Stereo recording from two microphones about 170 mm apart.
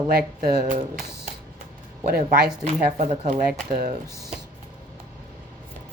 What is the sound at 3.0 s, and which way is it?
Speech, 45° right (ahead or behind).